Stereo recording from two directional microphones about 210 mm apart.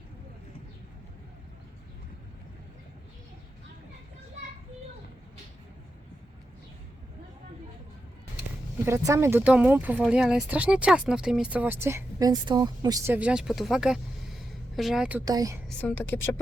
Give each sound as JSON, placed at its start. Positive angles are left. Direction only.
{"t": 8.8, "sound": "speech", "side_deg": -15}
{"t": 13.1, "sound": "speech", "side_deg": -5}
{"t": 15.2, "sound": "speech", "side_deg": -20}
{"t": 15.8, "sound": "a woman's voice", "side_deg": 10}